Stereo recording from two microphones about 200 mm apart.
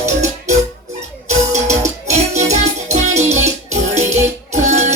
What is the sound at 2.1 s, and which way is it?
Music, 35° right (ahead or behind).